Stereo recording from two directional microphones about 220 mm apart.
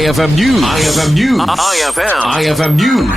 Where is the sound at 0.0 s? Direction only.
Centre (ahead or behind).